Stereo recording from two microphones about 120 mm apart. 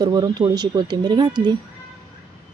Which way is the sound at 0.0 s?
35° right (ahead or behind).